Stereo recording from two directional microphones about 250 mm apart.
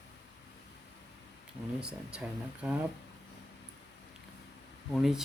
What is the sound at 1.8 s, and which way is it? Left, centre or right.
Speech, centre.